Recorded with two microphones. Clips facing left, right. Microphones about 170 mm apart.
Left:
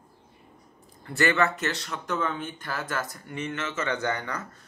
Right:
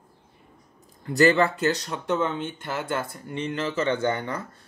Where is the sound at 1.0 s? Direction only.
35° right (ahead or behind).